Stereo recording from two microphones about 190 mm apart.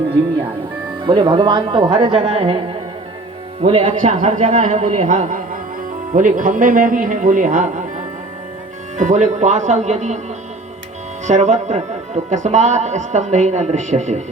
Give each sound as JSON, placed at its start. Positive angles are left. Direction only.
{"t": 1.0, "sound": "speech", "side_deg": -25}
{"t": 3.6, "sound": "speech", "side_deg": -30}
{"t": 9.0, "sound": "speech", "side_deg": -40}
{"t": 11.3, "sound": "speech", "side_deg": -40}